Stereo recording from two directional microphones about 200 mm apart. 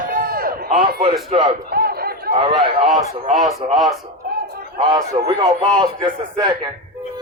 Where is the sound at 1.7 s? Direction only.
50° right (ahead or behind).